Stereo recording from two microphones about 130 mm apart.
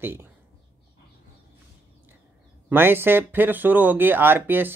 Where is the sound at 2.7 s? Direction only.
15° right (ahead or behind).